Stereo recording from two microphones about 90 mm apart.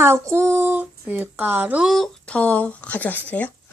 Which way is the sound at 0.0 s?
30° right (ahead or behind).